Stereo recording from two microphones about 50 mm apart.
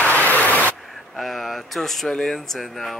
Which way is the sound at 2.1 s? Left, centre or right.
Centre.